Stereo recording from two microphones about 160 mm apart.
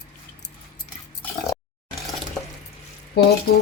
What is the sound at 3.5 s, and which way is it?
Speech, 70° left (ahead or behind).